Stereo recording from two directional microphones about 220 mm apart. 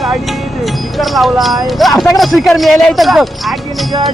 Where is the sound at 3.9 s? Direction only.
20° right (ahead or behind).